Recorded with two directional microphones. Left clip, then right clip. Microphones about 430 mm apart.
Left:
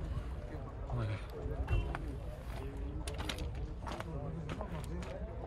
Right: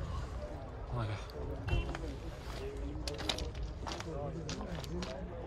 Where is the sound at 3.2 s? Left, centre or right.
Centre.